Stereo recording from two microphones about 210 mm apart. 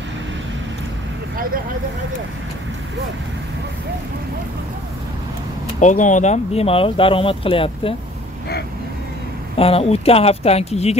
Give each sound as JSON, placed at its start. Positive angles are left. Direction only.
{"t": 5.8, "sound": "speech", "side_deg": 35}
{"t": 9.6, "sound": "speech", "side_deg": 30}